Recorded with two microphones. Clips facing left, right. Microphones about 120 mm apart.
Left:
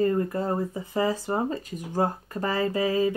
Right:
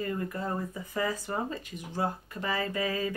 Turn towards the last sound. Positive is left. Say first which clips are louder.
# left 7 dB
turn(degrees=25)  # may be behind; listen again after turning